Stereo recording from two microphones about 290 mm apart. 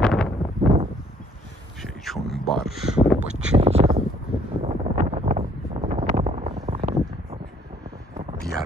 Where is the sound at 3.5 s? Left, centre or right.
Right.